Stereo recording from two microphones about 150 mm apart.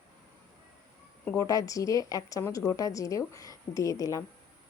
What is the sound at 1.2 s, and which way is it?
Speech, 20° left (ahead or behind).